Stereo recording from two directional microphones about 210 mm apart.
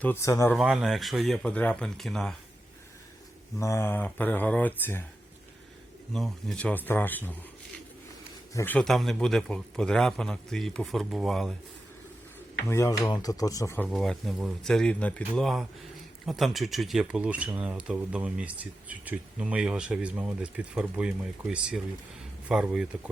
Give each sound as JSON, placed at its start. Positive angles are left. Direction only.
{"t": 0.0, "sound": "speech", "side_deg": 10}
{"t": 0.5, "sound": "speech", "side_deg": -5}
{"t": 3.6, "sound": "speech", "side_deg": 15}
{"t": 6.1, "sound": "speech", "side_deg": 0}
{"t": 8.5, "sound": "speech", "side_deg": 10}
{"t": 12.6, "sound": "speech", "side_deg": 15}
{"t": 13.8, "sound": "speech", "side_deg": 0}